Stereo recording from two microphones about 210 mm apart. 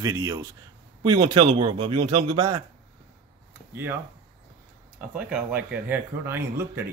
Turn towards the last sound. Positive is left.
turn(degrees=-10)  # may be behind; listen again after turning